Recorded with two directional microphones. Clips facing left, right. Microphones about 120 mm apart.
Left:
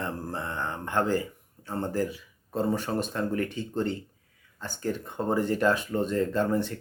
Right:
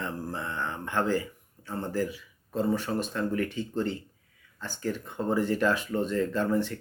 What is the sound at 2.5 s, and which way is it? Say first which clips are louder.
Speech: even; 25° left (ahead or behind).